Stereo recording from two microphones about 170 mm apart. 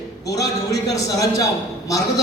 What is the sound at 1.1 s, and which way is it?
Speech, 20° left (ahead or behind).